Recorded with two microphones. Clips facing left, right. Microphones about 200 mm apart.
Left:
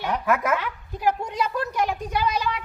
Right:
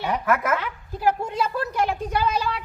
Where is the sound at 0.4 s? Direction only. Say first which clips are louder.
Even; 15° left (ahead or behind).